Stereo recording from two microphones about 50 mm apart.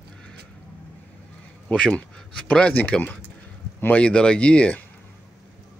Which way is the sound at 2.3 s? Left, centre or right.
Left.